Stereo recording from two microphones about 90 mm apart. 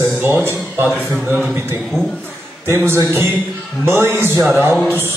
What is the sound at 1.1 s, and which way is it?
Speech, 5° right (ahead or behind).